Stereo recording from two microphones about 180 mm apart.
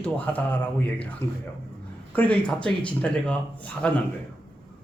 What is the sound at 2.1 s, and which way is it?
Speech, 5° left (ahead or behind).